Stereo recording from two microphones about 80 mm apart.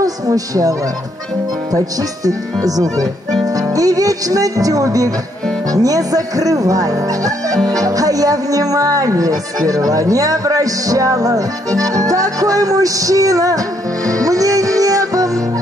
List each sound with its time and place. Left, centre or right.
0.0 s speech: right
14.2 s music: right